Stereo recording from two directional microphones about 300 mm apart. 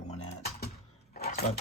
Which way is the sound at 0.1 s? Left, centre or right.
Left.